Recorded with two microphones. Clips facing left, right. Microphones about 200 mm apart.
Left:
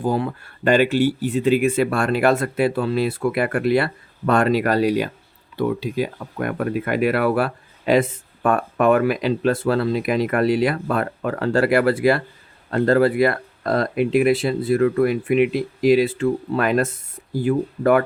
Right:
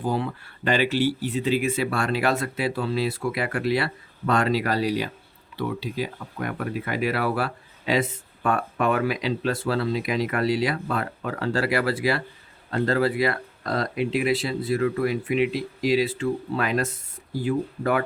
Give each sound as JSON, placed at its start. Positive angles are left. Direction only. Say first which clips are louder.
{"t": 0.1, "sound": "speech", "louder": "left 4 dB", "side_deg": 50}